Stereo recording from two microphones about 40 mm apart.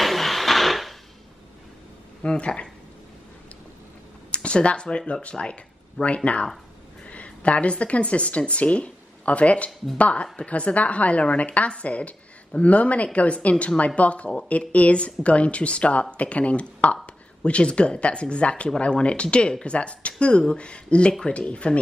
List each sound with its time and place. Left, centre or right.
0.0 s blender: centre
2.2 s speech: left
4.3 s a woman's voice: left